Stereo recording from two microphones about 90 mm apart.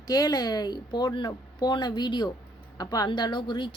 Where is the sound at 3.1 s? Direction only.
55° left (ahead or behind).